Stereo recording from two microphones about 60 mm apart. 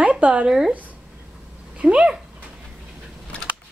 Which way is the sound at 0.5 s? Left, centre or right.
Centre.